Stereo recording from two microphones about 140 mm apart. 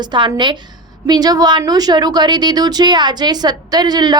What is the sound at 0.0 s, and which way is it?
A woman's voice, 30° right (ahead or behind).